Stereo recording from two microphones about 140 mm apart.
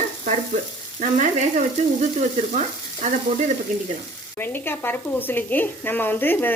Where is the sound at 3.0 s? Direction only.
60° right (ahead or behind).